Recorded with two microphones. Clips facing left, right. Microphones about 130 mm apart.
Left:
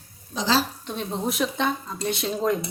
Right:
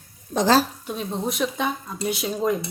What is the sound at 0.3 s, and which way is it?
Speech, 50° right (ahead or behind).